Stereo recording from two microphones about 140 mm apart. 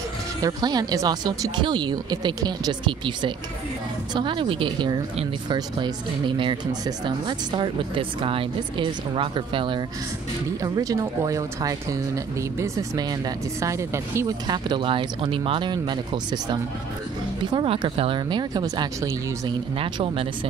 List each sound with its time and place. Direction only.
0.4 s speech: 30° right (ahead or behind)
10.6 s speech: 25° right (ahead or behind)
13.6 s speech: 20° right (ahead or behind)
14.7 s speech: 35° right (ahead or behind)
17.6 s speech: 40° right (ahead or behind)